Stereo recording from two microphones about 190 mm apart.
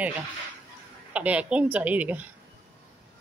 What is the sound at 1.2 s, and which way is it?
Speech, 5° right (ahead or behind).